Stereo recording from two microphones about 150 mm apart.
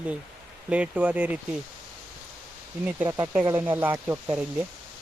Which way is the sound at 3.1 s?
20° right (ahead or behind).